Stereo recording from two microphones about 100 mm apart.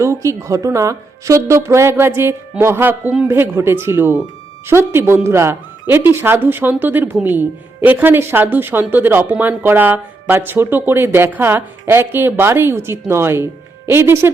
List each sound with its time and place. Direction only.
0.0 s a woman's voice: 30° right (ahead or behind)